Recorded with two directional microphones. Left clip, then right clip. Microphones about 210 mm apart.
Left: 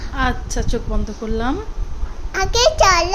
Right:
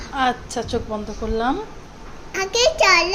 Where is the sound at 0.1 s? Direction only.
10° left (ahead or behind).